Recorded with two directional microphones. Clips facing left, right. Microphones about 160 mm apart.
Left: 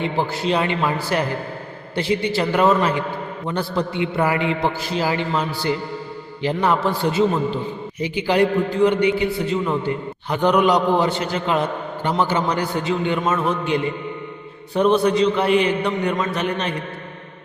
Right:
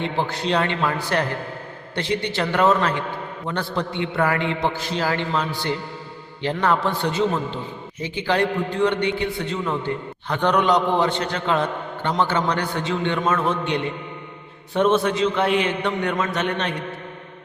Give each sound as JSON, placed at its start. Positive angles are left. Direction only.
{"t": 0.0, "sound": "a man's voice", "side_deg": 5}